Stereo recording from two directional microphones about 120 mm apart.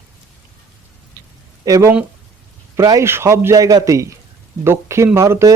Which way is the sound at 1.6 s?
25° right (ahead or behind).